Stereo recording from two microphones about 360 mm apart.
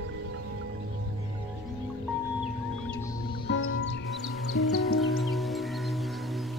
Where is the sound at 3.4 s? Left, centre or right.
Left.